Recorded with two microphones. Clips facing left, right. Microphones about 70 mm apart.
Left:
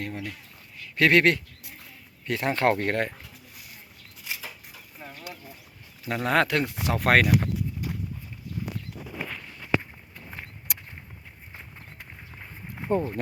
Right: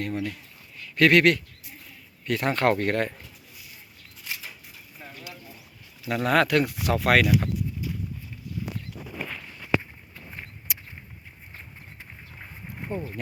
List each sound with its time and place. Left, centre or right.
0.0 s speech: centre
4.3 s a sound: centre
6.1 s speech: left
7.0 s speech: left
10.7 s walk: left
12.9 s speech: left